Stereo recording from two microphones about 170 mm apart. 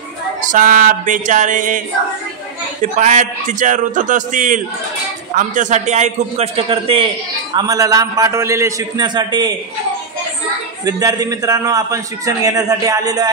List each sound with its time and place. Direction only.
0.5 s a man's voice: 55° right (ahead or behind)
2.8 s a man's voice: 45° right (ahead or behind)
7.5 s a man's voice: 20° right (ahead or behind)
10.9 s a man's voice: 20° right (ahead or behind)